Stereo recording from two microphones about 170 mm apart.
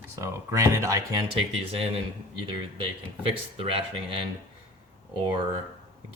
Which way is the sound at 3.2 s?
30° right (ahead or behind).